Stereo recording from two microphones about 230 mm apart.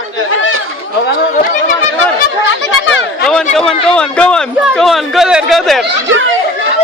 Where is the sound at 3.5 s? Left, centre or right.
Centre.